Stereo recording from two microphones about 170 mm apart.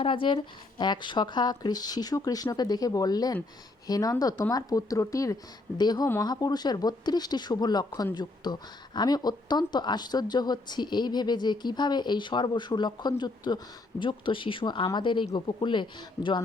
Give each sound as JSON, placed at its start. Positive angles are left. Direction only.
{"t": 0.0, "sound": "speech", "side_deg": 30}